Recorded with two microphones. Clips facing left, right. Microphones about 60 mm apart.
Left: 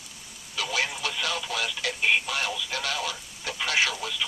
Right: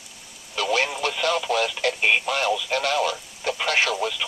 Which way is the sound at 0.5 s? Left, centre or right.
Right.